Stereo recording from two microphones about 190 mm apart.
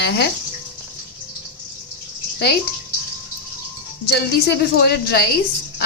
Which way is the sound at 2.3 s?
60° left (ahead or behind).